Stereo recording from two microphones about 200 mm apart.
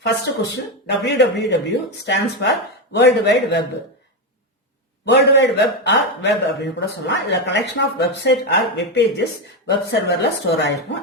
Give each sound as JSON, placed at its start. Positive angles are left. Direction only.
{"t": 0.0, "sound": "a man's voice", "side_deg": 60}
{"t": 5.0, "sound": "a man's voice", "side_deg": 60}